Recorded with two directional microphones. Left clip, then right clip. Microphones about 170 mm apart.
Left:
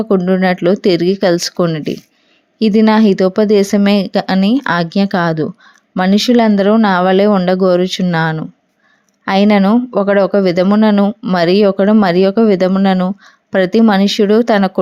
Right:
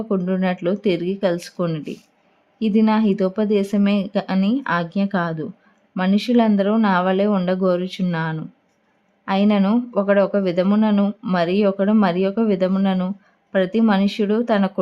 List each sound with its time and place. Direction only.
0.3 s speech: 35° left (ahead or behind)
11.3 s speech: 40° left (ahead or behind)